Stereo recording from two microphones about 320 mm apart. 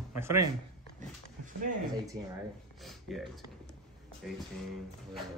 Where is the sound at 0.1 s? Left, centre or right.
Centre.